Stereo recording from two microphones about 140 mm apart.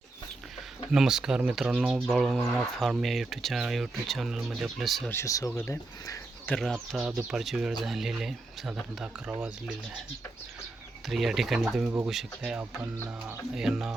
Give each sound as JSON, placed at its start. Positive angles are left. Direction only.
{"t": 0.9, "sound": "speech", "side_deg": -5}
{"t": 5.1, "sound": "speech", "side_deg": 25}
{"t": 6.5, "sound": "speech", "side_deg": 5}
{"t": 11.0, "sound": "speech", "side_deg": 0}